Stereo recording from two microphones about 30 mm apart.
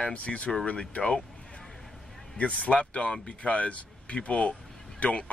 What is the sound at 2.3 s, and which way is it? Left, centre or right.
Speech, left.